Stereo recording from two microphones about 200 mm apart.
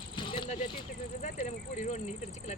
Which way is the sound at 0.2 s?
25° left (ahead or behind).